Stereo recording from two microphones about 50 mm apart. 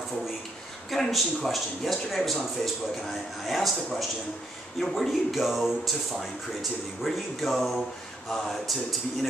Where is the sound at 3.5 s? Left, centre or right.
Centre.